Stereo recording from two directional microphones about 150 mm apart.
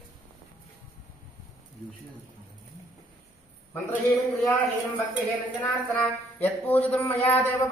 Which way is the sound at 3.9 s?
Centre (ahead or behind).